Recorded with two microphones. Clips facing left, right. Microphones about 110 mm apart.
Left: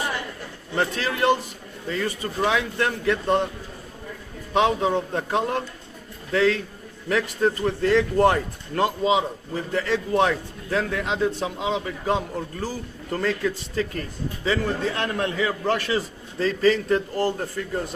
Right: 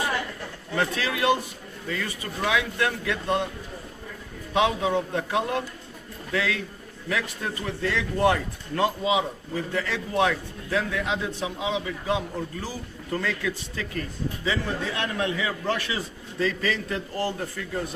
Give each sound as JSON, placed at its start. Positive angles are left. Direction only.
{"t": 0.8, "sound": "a man's voice", "side_deg": 35}
{"t": 4.5, "sound": "a man's voice", "side_deg": 40}